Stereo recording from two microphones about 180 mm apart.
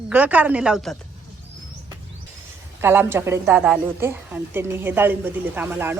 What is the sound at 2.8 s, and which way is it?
A woman's voice, 10° right (ahead or behind).